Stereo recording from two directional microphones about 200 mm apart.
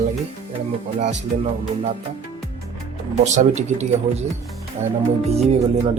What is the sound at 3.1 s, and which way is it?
Speech, 35° right (ahead or behind).